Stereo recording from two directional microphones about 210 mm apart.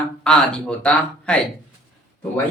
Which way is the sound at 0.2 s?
5° left (ahead or behind).